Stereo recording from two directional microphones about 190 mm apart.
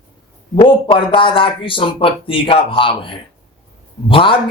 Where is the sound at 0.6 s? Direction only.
25° left (ahead or behind).